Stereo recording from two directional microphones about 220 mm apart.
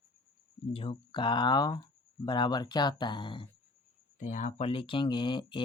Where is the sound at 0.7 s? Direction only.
25° left (ahead or behind).